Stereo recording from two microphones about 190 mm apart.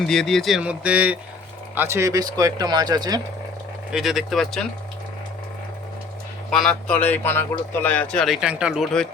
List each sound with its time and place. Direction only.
0.0 s speech: 5° left (ahead or behind); by 3.2 s 20° right (ahead or behind)
3.9 s speech: centre (ahead or behind)
6.5 s speech: 5° left (ahead or behind)